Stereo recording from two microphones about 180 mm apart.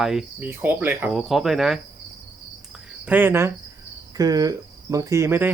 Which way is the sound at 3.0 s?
10° right (ahead or behind).